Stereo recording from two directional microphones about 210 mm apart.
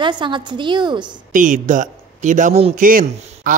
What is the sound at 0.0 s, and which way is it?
A woman's voice, 20° right (ahead or behind).